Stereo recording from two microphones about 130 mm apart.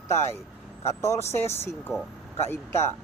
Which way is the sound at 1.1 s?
20° left (ahead or behind).